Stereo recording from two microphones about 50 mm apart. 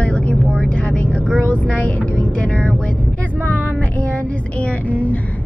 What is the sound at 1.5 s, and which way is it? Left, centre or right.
Speech, left.